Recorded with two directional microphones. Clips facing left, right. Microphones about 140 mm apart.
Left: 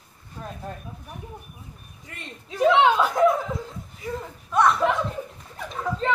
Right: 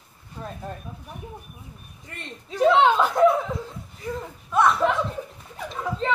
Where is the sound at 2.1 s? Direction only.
Centre (ahead or behind).